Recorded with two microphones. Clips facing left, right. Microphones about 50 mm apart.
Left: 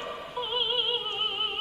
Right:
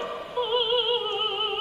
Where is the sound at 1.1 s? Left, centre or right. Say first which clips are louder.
Right 3 dB; centre.